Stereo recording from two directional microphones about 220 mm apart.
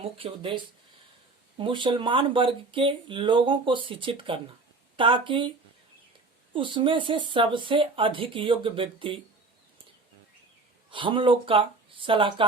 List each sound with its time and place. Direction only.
0.0 s speech: 25° right (ahead or behind)
6.5 s speech: 20° right (ahead or behind)
10.9 s speech: 20° right (ahead or behind)